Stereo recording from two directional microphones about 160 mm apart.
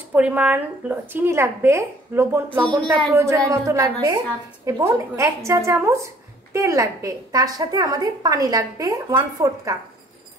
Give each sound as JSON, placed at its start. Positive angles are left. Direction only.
{"t": 0.1, "sound": "a woman's voice", "side_deg": -10}